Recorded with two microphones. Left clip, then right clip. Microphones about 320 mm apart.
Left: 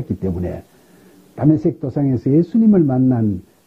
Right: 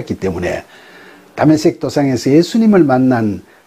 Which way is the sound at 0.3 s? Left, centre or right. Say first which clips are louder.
Right 8 dB; centre.